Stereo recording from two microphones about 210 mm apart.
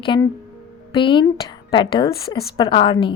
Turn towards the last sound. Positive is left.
turn(degrees=25)  # may be behind; listen again after turning